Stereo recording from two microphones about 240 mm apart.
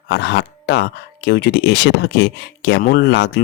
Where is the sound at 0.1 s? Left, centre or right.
Left.